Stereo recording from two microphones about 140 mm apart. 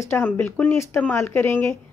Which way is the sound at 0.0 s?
15° left (ahead or behind).